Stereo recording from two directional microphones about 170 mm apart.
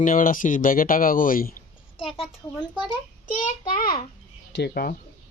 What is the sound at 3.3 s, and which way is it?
Speech, 50° left (ahead or behind).